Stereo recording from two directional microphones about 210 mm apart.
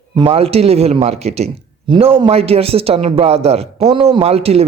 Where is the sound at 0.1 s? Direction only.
25° right (ahead or behind).